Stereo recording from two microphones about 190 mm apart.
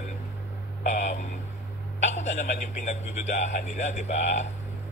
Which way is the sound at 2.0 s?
35° left (ahead or behind).